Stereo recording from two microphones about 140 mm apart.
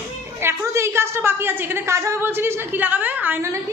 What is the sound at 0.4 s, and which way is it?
A woman's voice, 20° right (ahead or behind).